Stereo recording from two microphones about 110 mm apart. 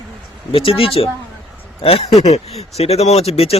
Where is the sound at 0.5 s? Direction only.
55° left (ahead or behind).